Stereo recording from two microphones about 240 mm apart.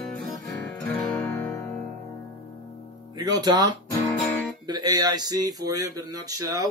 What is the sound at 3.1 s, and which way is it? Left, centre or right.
Speech, centre.